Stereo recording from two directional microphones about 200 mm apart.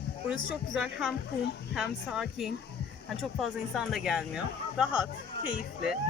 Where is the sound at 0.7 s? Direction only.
Centre (ahead or behind).